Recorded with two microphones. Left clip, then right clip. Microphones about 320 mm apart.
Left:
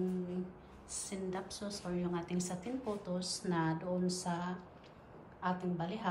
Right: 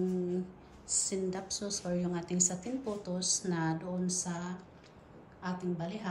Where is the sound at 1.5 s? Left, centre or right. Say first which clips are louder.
Right 6 dB; left.